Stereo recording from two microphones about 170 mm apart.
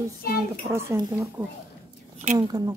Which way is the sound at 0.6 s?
15° right (ahead or behind).